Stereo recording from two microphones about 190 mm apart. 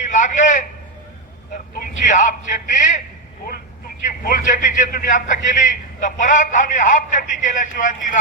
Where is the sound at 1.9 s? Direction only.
45° left (ahead or behind).